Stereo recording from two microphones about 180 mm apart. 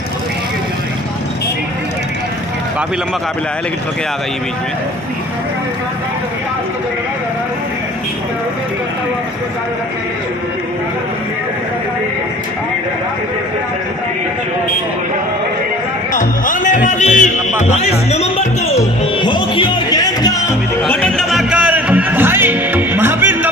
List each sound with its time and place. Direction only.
16.1 s music: 45° left (ahead or behind); by 20.5 s 20° left (ahead or behind)
20.8 s music: 5° left (ahead or behind); by 23.5 s 10° right (ahead or behind)